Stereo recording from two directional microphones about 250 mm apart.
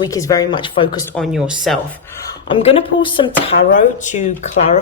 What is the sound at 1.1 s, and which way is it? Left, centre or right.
Speech, centre.